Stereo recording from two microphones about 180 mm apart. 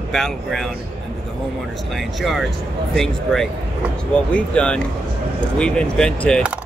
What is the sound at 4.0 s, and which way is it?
Speech, 5° left (ahead or behind).